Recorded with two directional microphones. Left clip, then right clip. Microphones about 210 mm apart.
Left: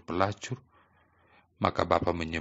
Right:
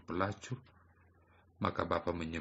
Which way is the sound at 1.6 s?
45° left (ahead or behind).